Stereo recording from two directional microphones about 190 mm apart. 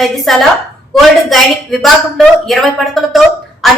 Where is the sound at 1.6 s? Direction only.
Centre (ahead or behind).